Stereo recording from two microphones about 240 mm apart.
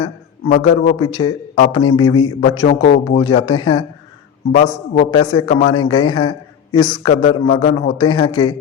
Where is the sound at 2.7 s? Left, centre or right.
Left.